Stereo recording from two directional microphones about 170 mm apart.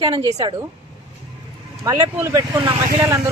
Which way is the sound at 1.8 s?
20° right (ahead or behind).